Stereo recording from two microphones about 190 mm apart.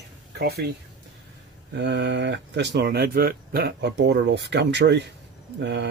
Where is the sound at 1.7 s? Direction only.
65° right (ahead or behind).